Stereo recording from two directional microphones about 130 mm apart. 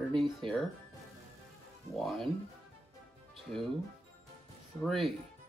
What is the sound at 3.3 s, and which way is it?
Speech, centre (ahead or behind).